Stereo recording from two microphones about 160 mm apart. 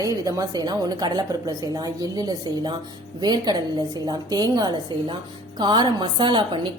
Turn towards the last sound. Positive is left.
turn(degrees=-30)  # may be behind; listen again after turning